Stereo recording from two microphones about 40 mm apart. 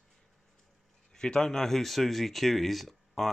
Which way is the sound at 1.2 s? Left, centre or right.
Centre.